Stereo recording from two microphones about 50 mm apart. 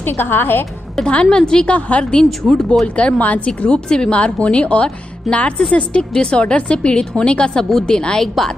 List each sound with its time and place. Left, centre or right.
0.0 s a woman's voice: left
1.0 s a woman's voice: centre
1.7 s speech: left
2.5 s a woman's voice: centre
3.0 s speech: left
5.3 s a woman's voice: centre
5.7 s a woman's voice: left